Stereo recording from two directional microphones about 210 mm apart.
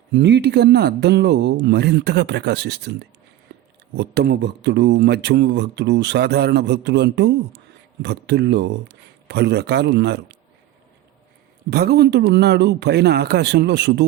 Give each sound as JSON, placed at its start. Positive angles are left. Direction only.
{"t": 0.1, "sound": "speech", "side_deg": -55}
{"t": 3.5, "sound": "a sound", "side_deg": -50}
{"t": 3.9, "sound": "speech", "side_deg": -50}
{"t": 11.7, "sound": "speech", "side_deg": -50}